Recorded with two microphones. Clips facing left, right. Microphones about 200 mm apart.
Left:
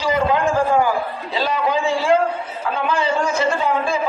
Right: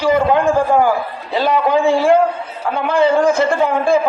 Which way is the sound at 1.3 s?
55° right (ahead or behind).